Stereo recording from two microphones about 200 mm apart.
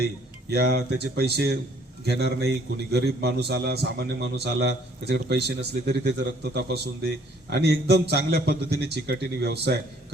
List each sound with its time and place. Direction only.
0.5 s a man's voice: 50° right (ahead or behind)